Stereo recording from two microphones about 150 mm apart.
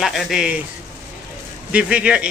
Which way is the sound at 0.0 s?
Centre (ahead or behind).